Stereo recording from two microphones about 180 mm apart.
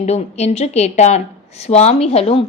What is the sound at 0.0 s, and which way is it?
A woman's voice, 40° left (ahead or behind).